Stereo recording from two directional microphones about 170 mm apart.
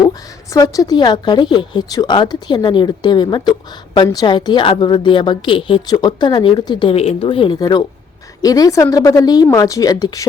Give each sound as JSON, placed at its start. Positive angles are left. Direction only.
{"t": 0.0, "sound": "a woman's voice", "side_deg": 20}